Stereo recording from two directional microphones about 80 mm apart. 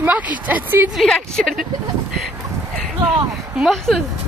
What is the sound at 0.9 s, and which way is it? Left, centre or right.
Speech, centre.